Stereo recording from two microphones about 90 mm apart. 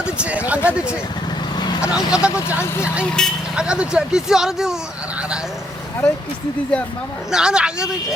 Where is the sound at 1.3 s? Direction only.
50° left (ahead or behind).